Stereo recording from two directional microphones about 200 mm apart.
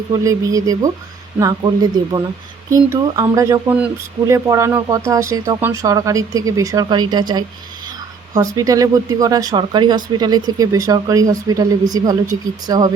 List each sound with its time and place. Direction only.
0.1 s speech: 15° right (ahead or behind)